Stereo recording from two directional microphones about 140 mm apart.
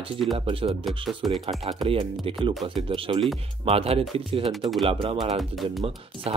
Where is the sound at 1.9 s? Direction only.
40° right (ahead or behind).